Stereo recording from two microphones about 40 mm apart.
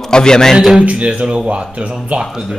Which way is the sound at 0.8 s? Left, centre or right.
Right.